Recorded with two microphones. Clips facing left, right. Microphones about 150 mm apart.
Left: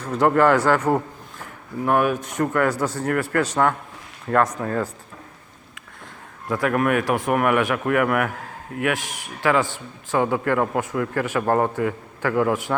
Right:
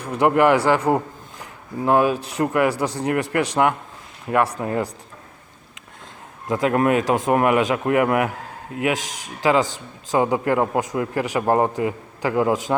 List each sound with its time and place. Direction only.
0.0 s a man's voice: 15° right (ahead or behind)
6.5 s a man's voice: 20° right (ahead or behind)